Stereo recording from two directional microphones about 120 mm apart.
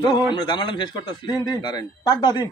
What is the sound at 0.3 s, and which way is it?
A man's voice, 40° left (ahead or behind).